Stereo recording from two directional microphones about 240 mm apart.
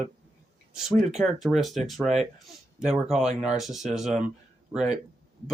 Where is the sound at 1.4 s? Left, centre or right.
Centre.